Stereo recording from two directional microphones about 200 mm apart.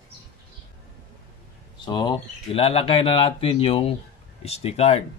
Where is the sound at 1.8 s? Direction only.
20° left (ahead or behind).